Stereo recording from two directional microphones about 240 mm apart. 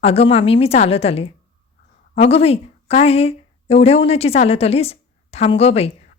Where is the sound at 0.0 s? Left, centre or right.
Left.